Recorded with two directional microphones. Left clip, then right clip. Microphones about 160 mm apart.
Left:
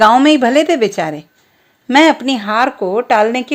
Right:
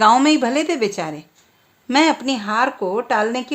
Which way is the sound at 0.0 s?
30° left (ahead or behind).